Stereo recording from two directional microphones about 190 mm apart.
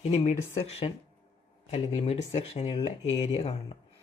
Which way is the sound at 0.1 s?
35° left (ahead or behind).